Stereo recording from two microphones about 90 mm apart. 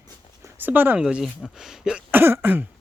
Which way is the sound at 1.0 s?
5° right (ahead or behind).